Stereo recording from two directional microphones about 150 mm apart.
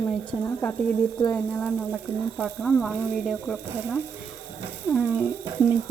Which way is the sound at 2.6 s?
5° left (ahead or behind).